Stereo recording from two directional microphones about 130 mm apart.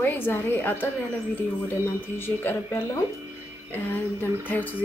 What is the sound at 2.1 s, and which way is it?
A woman's voice, 15° left (ahead or behind).